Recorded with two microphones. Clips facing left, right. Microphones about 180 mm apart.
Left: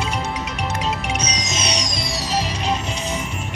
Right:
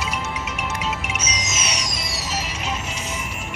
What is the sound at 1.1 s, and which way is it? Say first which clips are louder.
Music: left 4 dB; 35° left (ahead or behind).